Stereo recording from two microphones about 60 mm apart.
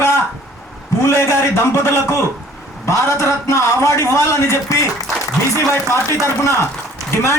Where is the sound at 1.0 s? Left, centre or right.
Left.